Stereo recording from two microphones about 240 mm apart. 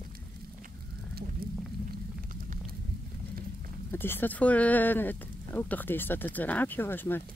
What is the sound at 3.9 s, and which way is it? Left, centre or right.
Speech, centre.